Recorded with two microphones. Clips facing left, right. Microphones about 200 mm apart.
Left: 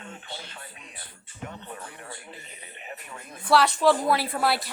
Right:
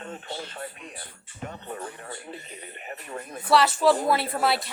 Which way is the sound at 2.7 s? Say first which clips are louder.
Right 5 dB; 45° right (ahead or behind).